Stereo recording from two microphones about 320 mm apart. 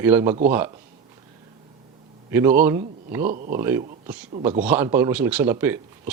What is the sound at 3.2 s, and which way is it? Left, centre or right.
Speech, right.